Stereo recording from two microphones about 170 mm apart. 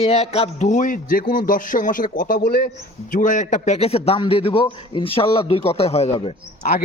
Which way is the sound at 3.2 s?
50° left (ahead or behind).